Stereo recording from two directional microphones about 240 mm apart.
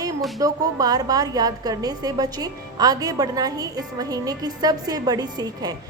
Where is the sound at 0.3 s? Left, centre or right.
Centre.